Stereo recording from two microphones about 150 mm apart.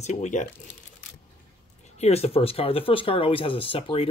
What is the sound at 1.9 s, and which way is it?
Speech, 45° left (ahead or behind).